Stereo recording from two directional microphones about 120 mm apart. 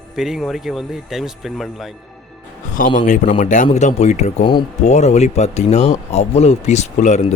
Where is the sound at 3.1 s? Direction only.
90° left.